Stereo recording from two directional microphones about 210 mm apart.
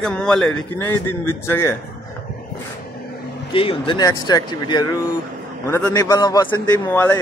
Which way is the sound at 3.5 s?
25° left (ahead or behind).